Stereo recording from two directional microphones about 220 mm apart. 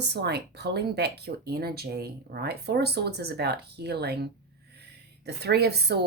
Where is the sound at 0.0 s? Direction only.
50° right (ahead or behind).